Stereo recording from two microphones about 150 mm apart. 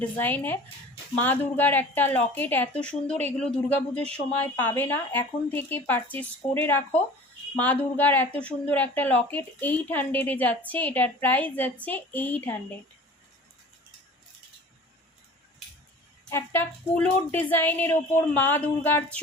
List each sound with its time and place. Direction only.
0.2 s a woman's voice: 10° left (ahead or behind)
16.3 s a woman's voice: 15° left (ahead or behind)